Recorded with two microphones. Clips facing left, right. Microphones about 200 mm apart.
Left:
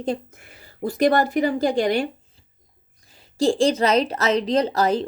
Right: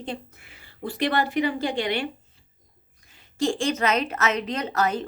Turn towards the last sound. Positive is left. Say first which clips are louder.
# left 6 dB
turn(degrees=35)  # may be behind; listen again after turning